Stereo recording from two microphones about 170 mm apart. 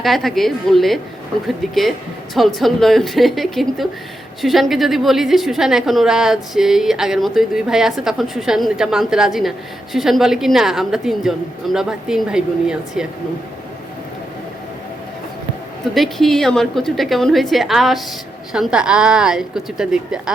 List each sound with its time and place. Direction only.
0.0 s a woman's voice: centre (ahead or behind)
16.0 s a woman's voice: centre (ahead or behind)